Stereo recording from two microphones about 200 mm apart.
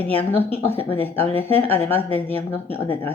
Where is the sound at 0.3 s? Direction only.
10° left (ahead or behind).